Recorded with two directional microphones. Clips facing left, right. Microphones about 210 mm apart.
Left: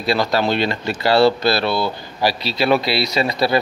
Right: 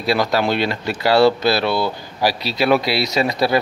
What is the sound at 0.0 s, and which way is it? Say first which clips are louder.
Speech: even; 10° right (ahead or behind).